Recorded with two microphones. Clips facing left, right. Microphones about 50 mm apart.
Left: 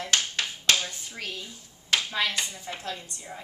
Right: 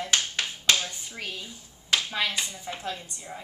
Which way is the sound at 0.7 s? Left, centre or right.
Centre.